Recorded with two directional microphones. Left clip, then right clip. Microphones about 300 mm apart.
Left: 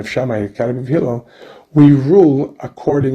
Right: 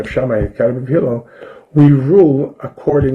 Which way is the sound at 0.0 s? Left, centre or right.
Left.